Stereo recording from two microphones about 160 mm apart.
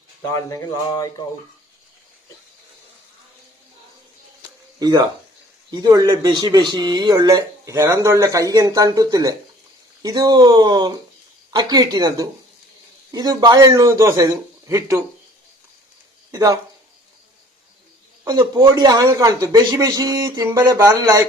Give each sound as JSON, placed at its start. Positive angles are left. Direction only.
{"t": 0.4, "sound": "a sound", "side_deg": 20}
{"t": 4.8, "sound": "speech", "side_deg": -25}
{"t": 16.3, "sound": "speech", "side_deg": -20}
{"t": 18.3, "sound": "speech", "side_deg": -25}